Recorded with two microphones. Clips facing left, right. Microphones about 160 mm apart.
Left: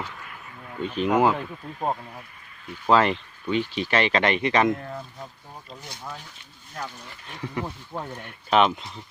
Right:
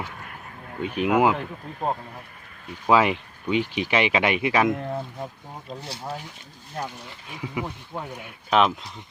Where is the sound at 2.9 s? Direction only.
10° right (ahead or behind).